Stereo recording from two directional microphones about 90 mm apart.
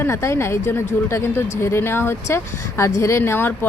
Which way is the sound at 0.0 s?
30° left (ahead or behind).